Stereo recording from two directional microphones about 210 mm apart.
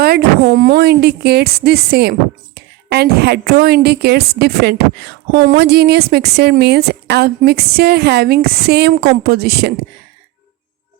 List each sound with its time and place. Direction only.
0.0 s a woman's voice: 50° right (ahead or behind)